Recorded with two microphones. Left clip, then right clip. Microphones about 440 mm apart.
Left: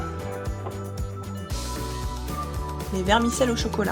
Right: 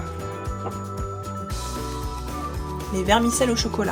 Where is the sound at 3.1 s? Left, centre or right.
Left.